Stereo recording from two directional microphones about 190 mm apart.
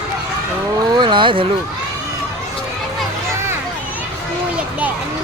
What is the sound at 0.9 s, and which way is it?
Speech, 25° right (ahead or behind).